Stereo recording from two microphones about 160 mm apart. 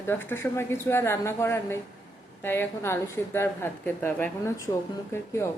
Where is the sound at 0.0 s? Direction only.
15° left (ahead or behind).